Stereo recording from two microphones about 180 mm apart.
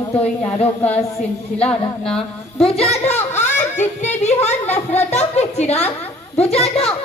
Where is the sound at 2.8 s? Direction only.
35° left (ahead or behind).